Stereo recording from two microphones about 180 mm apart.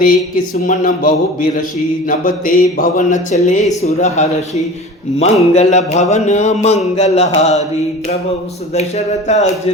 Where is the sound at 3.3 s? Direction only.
45° left (ahead or behind).